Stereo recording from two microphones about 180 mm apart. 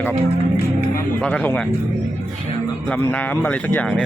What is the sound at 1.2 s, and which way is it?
Speech, 5° left (ahead or behind).